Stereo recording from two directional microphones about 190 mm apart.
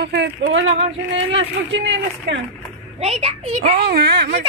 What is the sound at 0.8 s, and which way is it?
Speech, 30° right (ahead or behind).